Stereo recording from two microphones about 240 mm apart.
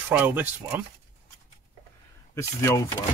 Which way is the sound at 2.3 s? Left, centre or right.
Centre.